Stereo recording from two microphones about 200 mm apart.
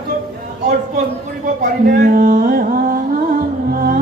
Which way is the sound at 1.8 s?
40° right (ahead or behind).